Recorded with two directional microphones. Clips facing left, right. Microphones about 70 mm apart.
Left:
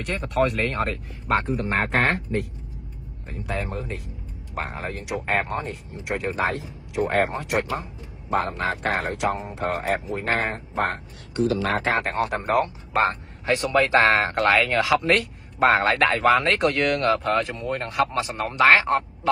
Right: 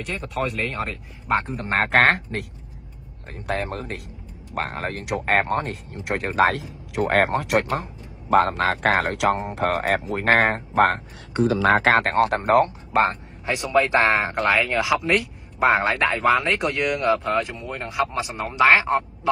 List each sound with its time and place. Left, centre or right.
0.0 s speech: centre
1.8 s speech: right
3.3 s speech: right
6.3 s speech: right
7.2 s speech: right
8.3 s speech: right
9.4 s speech: right
11.8 s speech: right
12.1 s speech: right
12.9 s a man's voice: right
13.5 s speech: centre